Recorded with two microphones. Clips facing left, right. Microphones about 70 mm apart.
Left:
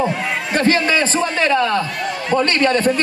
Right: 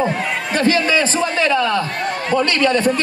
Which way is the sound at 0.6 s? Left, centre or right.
Left.